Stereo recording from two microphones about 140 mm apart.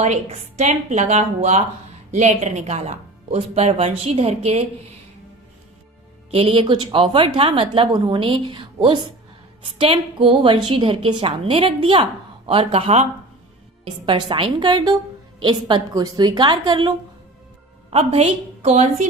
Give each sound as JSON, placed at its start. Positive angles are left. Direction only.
{"t": 0.0, "sound": "speech", "side_deg": -55}
{"t": 6.3, "sound": "a woman's voice", "side_deg": -40}
{"t": 17.9, "sound": "speech", "side_deg": -50}